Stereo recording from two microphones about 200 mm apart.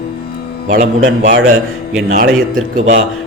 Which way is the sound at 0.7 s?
40° right (ahead or behind).